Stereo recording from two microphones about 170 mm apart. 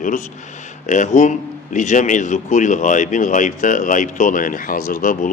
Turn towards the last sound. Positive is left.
turn(degrees=50)  # may be behind; listen again after turning